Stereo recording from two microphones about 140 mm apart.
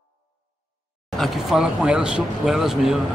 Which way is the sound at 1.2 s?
5° right (ahead or behind).